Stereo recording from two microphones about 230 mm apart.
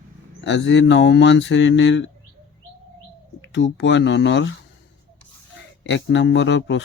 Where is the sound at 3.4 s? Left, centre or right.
Left.